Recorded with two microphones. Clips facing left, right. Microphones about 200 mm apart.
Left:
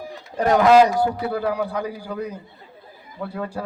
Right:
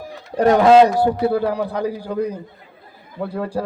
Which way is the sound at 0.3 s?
25° right (ahead or behind).